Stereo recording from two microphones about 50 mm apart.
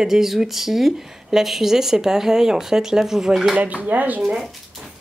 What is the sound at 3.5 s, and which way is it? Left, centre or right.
Speech, right.